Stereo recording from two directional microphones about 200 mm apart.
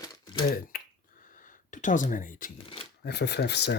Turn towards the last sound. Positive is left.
turn(degrees=55)  # may be behind; listen again after turning